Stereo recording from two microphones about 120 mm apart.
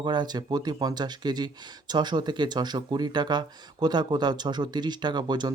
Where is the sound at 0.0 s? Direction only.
40° right (ahead or behind).